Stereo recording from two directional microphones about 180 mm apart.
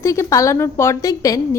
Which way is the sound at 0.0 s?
15° left (ahead or behind).